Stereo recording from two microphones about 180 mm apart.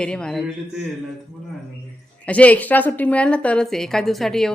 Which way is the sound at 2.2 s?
5° left (ahead or behind).